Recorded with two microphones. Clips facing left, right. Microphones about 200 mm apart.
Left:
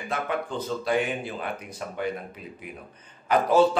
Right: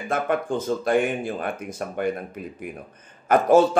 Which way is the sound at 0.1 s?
50° right (ahead or behind).